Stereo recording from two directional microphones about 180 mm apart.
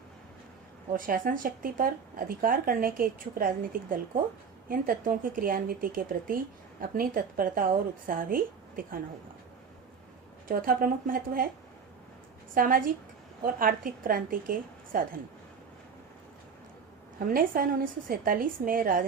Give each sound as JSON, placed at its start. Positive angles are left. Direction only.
{"t": 0.9, "sound": "speech", "side_deg": -50}
{"t": 10.5, "sound": "speech", "side_deg": -55}
{"t": 12.5, "sound": "speech", "side_deg": -50}
{"t": 17.2, "sound": "speech", "side_deg": -50}